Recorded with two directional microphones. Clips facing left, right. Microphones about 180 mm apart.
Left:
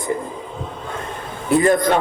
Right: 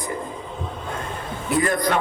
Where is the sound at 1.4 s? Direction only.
25° left (ahead or behind).